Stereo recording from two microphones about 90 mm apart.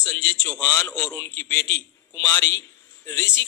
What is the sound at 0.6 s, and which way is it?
A man's voice, 30° left (ahead or behind).